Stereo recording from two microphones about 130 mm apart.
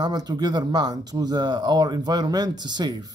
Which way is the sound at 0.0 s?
30° right (ahead or behind).